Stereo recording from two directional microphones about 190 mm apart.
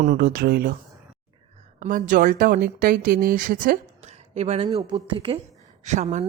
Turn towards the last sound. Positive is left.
turn(degrees=-40)  # may be behind; listen again after turning